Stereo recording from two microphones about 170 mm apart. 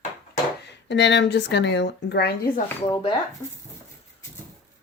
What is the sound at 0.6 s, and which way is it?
Speech, 90° left.